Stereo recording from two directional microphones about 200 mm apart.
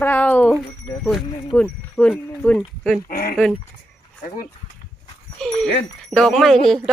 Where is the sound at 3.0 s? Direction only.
45° left (ahead or behind).